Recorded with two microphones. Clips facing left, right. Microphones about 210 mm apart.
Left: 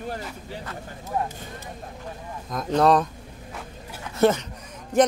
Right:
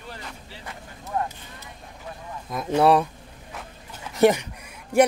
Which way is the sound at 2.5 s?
10° right (ahead or behind).